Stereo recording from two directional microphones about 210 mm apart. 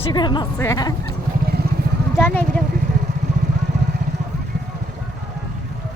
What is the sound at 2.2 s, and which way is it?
Speech, 10° left (ahead or behind).